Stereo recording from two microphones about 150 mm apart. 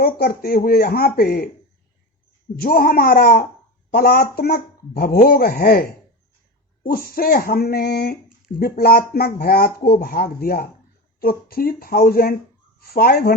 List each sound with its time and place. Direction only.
0.0 s speech: 85° left
2.6 s speech: 75° left (ahead or behind)
6.9 s speech: 80° left